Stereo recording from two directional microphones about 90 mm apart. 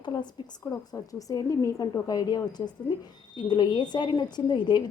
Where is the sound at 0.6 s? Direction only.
40° left (ahead or behind).